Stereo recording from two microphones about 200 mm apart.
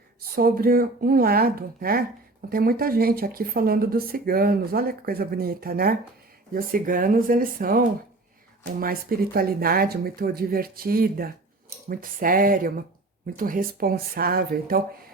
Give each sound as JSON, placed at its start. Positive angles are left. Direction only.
{"t": 0.2, "sound": "speech", "side_deg": -50}